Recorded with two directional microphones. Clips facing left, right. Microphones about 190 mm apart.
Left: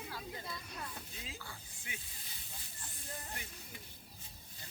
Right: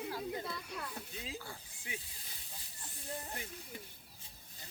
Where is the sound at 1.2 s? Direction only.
35° right (ahead or behind).